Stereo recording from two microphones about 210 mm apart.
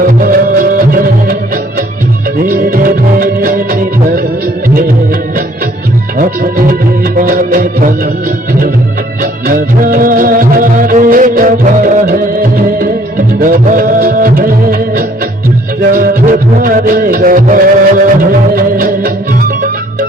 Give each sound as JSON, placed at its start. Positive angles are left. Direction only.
{"t": 0.0, "sound": "music", "side_deg": -40}
{"t": 2.5, "sound": "music", "side_deg": -40}
{"t": 6.1, "sound": "music", "side_deg": -40}
{"t": 9.2, "sound": "music", "side_deg": -45}